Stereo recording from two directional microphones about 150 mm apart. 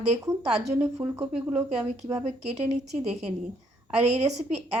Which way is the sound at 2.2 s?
45° right (ahead or behind).